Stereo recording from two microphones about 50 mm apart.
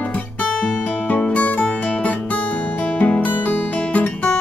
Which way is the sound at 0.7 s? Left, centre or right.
Left.